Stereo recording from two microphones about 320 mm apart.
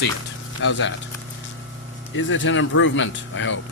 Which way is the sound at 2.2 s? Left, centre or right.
Left.